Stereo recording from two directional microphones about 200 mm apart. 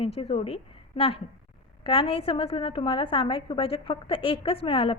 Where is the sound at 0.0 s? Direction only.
30° left (ahead or behind).